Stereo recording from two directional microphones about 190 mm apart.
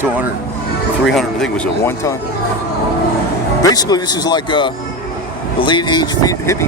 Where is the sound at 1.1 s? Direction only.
Centre (ahead or behind).